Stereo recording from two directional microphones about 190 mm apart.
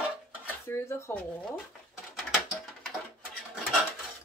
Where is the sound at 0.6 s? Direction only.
15° left (ahead or behind).